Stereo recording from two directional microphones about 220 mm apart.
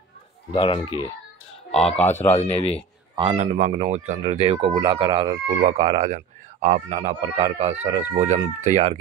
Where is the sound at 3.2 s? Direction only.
30° right (ahead or behind).